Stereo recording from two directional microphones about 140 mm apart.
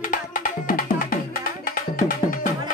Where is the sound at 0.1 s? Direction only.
75° left (ahead or behind); by 1.2 s 90° left.